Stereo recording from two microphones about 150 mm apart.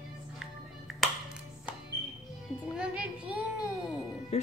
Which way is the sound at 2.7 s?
5° right (ahead or behind).